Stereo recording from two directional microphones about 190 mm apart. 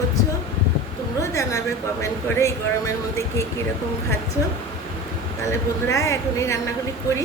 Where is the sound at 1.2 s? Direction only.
15° left (ahead or behind).